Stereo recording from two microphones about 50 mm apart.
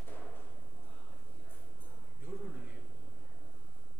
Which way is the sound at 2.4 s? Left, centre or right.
Centre.